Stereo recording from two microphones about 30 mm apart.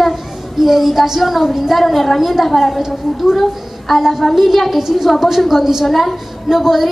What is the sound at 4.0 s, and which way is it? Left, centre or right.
A woman's voice, centre.